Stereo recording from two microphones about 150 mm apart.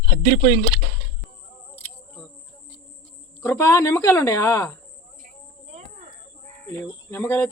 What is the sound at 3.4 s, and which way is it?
Speech, 15° left (ahead or behind).